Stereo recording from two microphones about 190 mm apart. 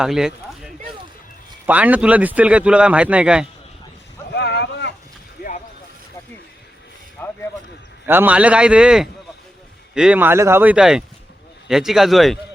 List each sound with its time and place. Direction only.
0.0 s speech: centre (ahead or behind)
4.4 s boat: 60° left (ahead or behind)
7.2 s a sound: 10° left (ahead or behind)
8.0 s a man's voice: 10° right (ahead or behind)